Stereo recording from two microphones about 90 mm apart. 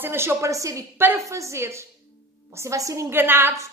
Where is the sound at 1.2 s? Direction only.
35° right (ahead or behind).